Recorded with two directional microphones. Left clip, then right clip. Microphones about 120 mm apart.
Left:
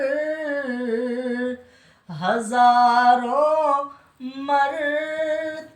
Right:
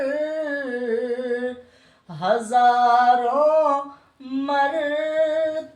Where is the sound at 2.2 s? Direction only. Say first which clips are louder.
Even; 25° right (ahead or behind).